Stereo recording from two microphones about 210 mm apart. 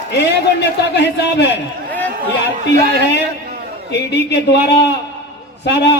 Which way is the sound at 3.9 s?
55° left (ahead or behind).